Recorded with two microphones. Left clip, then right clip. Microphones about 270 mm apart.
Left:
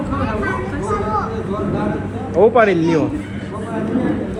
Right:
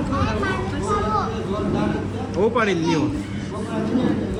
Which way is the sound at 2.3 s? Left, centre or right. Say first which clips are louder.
Left 8 dB; centre.